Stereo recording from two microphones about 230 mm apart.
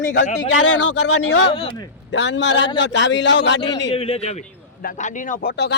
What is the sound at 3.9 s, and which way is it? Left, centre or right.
Speech, left.